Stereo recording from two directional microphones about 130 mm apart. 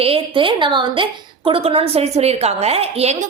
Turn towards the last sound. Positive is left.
turn(degrees=-50)  # may be behind; listen again after turning